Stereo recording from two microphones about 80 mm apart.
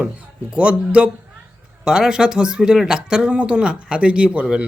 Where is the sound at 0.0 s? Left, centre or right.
Centre.